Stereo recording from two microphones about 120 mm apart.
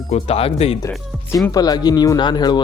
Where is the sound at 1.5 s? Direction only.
30° left (ahead or behind).